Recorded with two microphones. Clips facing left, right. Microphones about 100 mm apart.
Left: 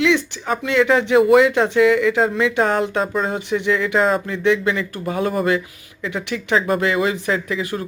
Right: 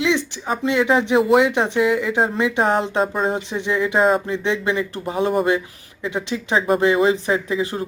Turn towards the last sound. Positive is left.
turn(degrees=-25)  # may be behind; listen again after turning